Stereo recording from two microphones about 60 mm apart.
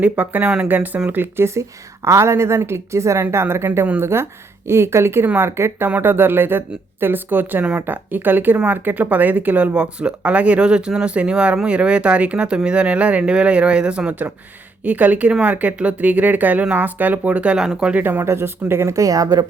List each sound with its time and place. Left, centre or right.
0.0 s speech: right
1.5 s a woman's voice: right
6.0 s speech: right; by 18.0 s centre
18.0 s a woman's voice: right
18.9 s a woman's voice: right